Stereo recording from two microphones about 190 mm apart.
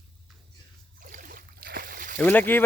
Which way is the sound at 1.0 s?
45° right (ahead or behind).